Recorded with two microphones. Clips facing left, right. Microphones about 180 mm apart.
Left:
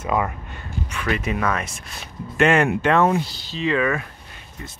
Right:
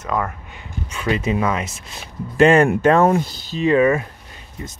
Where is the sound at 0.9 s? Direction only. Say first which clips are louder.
Right 4 dB; 25° right (ahead or behind).